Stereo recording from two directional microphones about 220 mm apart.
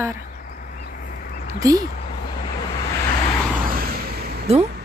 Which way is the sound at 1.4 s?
15° right (ahead or behind).